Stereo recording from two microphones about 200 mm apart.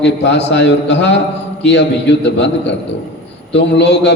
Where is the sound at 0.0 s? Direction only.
65° left (ahead or behind).